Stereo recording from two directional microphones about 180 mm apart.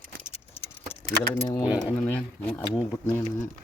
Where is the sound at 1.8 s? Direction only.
5° left (ahead or behind).